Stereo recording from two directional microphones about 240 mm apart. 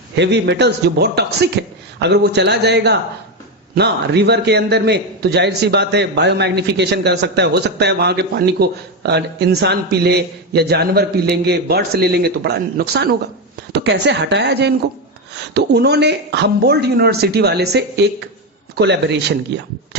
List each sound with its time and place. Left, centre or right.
0.2 s a man's voice: right